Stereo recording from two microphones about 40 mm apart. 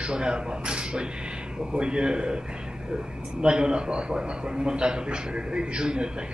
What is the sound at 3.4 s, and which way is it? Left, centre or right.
A man's voice, right.